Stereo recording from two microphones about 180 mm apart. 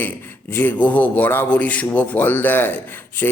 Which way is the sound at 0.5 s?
10° left (ahead or behind).